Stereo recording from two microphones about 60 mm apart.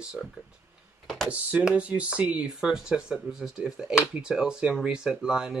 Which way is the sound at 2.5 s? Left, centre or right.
Centre.